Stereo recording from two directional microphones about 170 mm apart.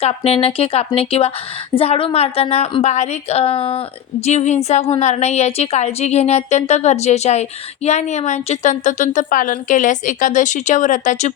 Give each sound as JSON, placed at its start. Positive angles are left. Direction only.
{"t": 0.3, "sound": "a woman's voice", "side_deg": 35}